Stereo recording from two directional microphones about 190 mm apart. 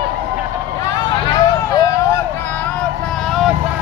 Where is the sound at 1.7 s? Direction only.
20° left (ahead or behind).